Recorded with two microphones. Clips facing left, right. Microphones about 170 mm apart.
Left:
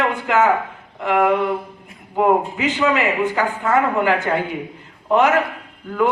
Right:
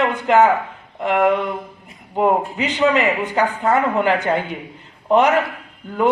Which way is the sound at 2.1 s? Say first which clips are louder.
Left 1 dB; 20° right (ahead or behind).